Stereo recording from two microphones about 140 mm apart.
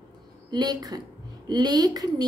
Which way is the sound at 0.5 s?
30° right (ahead or behind).